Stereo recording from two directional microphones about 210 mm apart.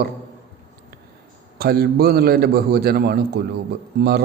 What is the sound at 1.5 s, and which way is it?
A man's voice, 45° right (ahead or behind).